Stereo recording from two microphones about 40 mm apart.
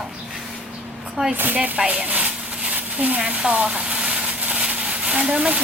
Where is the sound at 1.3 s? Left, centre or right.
Right.